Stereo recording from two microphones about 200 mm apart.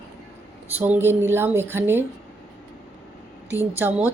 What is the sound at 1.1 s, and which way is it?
Speech, 10° right (ahead or behind).